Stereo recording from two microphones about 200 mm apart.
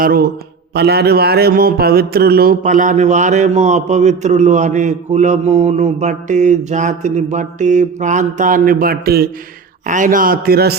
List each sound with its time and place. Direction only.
0.0 s a man's voice: 50° right (ahead or behind)
0.7 s mantra: 55° right (ahead or behind)
9.8 s a man's voice: 40° right (ahead or behind)